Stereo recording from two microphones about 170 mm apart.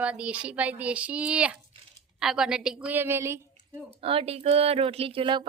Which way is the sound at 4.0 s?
35° right (ahead or behind).